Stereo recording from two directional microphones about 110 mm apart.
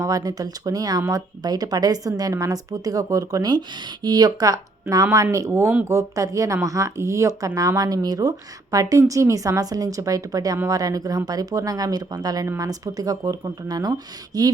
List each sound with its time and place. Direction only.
0.0 s speech: 30° right (ahead or behind)